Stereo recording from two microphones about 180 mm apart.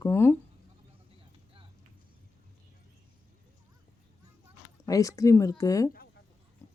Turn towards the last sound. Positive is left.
turn(degrees=20)  # may be behind; listen again after turning